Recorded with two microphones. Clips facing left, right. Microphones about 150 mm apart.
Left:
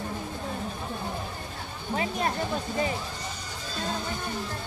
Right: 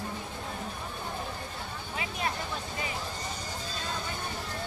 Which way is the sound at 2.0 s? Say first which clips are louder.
Left 6 dB; 40° left (ahead or behind).